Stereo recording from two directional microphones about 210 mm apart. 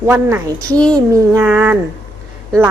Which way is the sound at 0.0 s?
10° right (ahead or behind).